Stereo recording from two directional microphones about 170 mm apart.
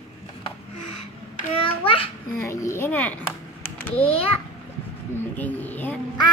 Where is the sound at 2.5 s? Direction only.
15° left (ahead or behind).